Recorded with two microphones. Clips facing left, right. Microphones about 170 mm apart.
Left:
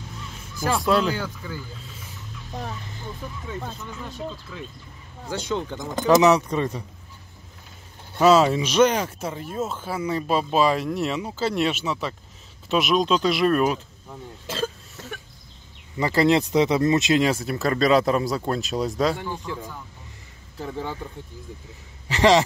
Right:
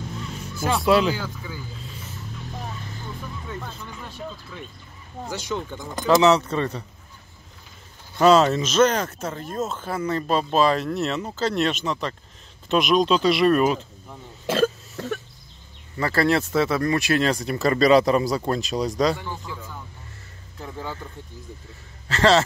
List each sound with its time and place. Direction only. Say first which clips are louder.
0.6 s speech: right 2 dB; centre (ahead or behind)
5.4 s speech: left 4 dB; 25° left (ahead or behind)
8.2 s speech: even; 5° left (ahead or behind)
14.4 s a sound: right 8 dB; 60° right (ahead or behind)
16.0 s speech: left 2 dB; 15° left (ahead or behind)
17.3 s speech: right 1 dB; centre (ahead or behind)
22.0 s a man's voice: left 1 dB; 15° left (ahead or behind)